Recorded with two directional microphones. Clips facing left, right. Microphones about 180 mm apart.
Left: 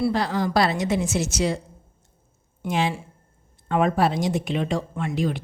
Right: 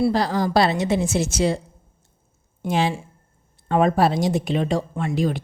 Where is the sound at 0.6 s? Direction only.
25° right (ahead or behind).